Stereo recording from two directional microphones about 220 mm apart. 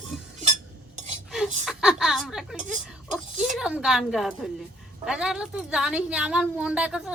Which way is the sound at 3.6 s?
5° right (ahead or behind).